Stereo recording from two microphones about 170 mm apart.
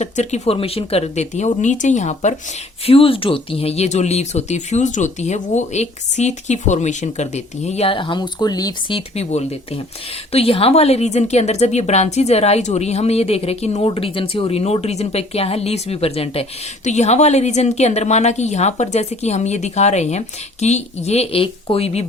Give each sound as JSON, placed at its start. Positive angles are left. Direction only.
{"t": 0.0, "sound": "speech", "side_deg": 40}
{"t": 2.8, "sound": "speech", "side_deg": 35}